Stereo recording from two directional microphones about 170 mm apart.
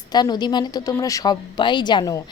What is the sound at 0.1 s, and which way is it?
Speech, 25° left (ahead or behind).